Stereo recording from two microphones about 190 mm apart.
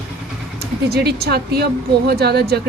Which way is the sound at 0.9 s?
55° right (ahead or behind).